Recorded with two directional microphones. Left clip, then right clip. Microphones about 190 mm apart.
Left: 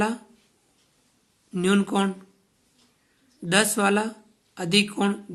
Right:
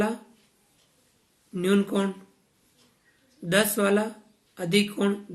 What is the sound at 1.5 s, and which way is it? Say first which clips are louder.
Speech: left 1 dB; 35° left (ahead or behind).